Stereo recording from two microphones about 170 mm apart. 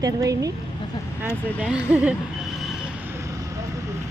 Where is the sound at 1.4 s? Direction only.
10° left (ahead or behind).